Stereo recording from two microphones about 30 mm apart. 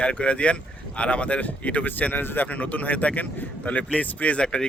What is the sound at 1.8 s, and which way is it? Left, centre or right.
Speech, left.